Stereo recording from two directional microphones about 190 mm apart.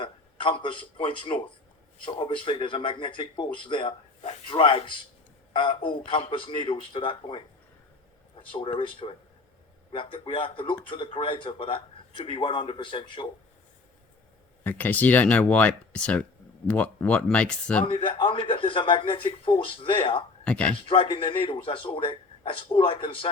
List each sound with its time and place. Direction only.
0.0 s speech: 25° left (ahead or behind)
8.4 s a sound: 25° left (ahead or behind)
9.0 s speech: 25° left (ahead or behind)
14.6 s speech: 10° left (ahead or behind)
17.8 s speech: 25° left (ahead or behind)
20.4 s speech: 5° left (ahead or behind)
20.8 s speech: 30° left (ahead or behind)